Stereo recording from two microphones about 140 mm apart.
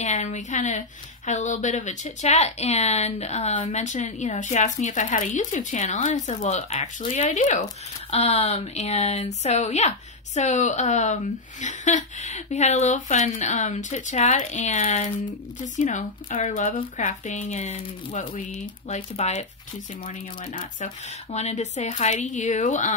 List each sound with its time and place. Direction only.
0.0 s speech: 55° left (ahead or behind)
8.1 s a woman's voice: 50° left (ahead or behind)
21.3 s speech: 50° left (ahead or behind)